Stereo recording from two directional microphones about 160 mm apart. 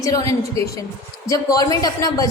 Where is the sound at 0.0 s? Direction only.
20° left (ahead or behind).